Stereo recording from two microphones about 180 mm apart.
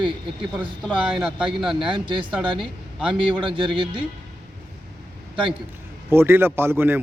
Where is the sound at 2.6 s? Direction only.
5° right (ahead or behind).